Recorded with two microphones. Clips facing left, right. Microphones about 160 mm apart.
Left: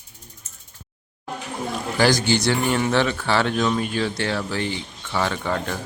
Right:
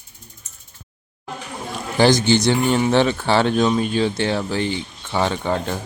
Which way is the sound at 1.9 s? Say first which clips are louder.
Right 4 dB; 20° right (ahead or behind).